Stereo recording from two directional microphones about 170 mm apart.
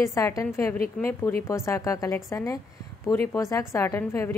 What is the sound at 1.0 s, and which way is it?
Speech, 5° left (ahead or behind).